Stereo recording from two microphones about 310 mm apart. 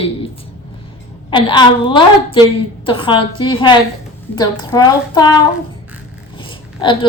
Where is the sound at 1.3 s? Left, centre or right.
Centre.